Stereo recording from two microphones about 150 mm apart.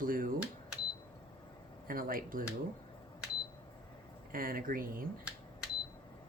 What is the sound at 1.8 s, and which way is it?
Speech, 70° right (ahead or behind).